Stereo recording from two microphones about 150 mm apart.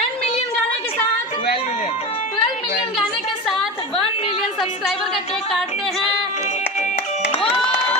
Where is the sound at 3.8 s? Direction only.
35° left (ahead or behind).